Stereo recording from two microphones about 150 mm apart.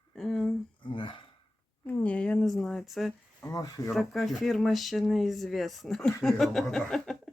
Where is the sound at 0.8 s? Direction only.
35° left (ahead or behind).